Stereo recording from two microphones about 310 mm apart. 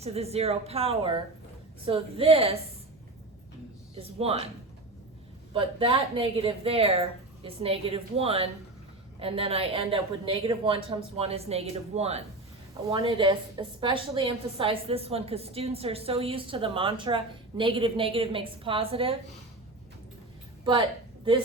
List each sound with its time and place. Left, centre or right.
0.0 s a woman's voice: centre
3.9 s speech: centre
5.5 s a woman's voice: centre